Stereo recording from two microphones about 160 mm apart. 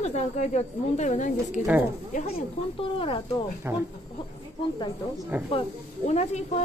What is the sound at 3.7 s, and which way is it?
Speech, 15° right (ahead or behind).